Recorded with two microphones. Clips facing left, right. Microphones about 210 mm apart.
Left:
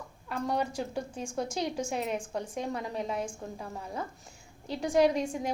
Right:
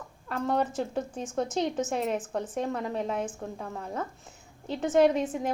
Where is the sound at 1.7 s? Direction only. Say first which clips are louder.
Right 3 dB; 10° left (ahead or behind).